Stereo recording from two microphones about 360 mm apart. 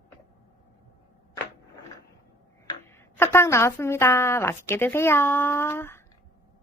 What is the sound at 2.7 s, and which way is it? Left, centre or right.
Speech, centre.